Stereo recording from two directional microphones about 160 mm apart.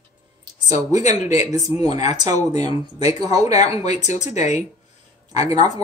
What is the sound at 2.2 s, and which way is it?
Speech, 45° left (ahead or behind).